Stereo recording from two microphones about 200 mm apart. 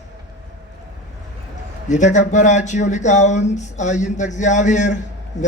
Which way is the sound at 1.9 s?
35° left (ahead or behind).